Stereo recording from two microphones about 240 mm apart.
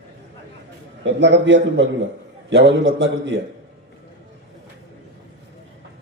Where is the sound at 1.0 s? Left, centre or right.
Right.